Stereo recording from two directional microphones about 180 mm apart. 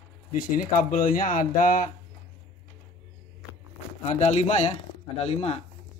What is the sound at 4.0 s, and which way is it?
A man's voice, 40° left (ahead or behind).